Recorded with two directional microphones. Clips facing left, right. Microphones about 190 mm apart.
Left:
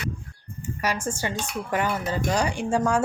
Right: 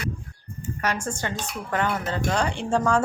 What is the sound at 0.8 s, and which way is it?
Speech, 10° left (ahead or behind).